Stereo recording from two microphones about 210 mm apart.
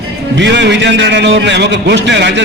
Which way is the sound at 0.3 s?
55° right (ahead or behind).